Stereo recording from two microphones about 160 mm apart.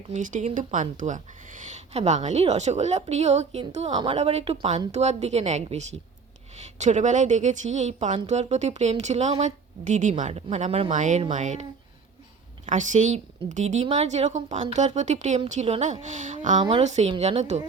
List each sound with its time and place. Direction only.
0.1 s a woman's voice: 50° right (ahead or behind)
10.9 s a woman's voice: 50° right (ahead or behind)
12.6 s a woman's voice: 50° right (ahead or behind)
16.6 s a woman's voice: 35° right (ahead or behind)